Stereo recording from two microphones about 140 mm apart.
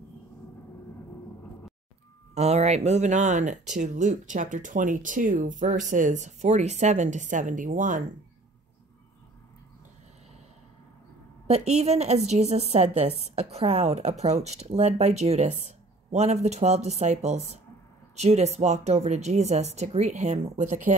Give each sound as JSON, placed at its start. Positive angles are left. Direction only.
{"t": 2.3, "sound": "speech", "side_deg": -50}
{"t": 11.4, "sound": "speech", "side_deg": -50}